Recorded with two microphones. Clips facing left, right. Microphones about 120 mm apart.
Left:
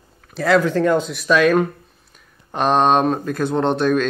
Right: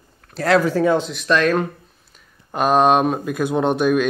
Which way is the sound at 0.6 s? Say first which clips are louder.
Even; 10° right (ahead or behind).